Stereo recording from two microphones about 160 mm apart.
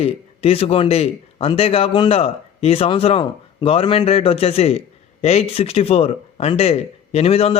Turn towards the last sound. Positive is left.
turn(degrees=40)  # may be behind; listen again after turning